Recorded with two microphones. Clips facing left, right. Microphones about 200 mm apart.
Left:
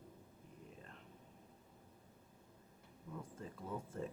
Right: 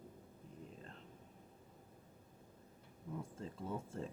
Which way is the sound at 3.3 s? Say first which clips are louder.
Even; 25° right (ahead or behind).